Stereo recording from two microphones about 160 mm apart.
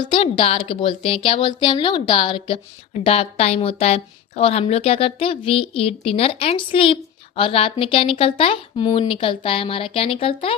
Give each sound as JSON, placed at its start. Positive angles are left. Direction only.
{"t": 0.0, "sound": "a woman's voice", "side_deg": 30}